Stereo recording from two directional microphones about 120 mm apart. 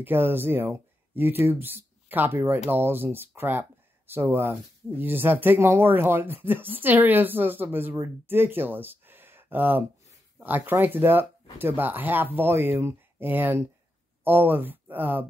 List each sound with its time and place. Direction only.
0.0 s speech: 15° right (ahead or behind)